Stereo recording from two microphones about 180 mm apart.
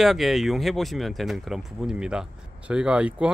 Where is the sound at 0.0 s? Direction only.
Centre (ahead or behind).